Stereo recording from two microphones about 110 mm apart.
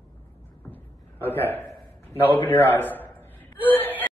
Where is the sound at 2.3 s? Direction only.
20° left (ahead or behind).